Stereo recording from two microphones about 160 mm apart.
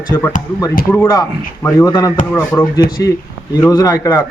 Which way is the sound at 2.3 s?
10° left (ahead or behind).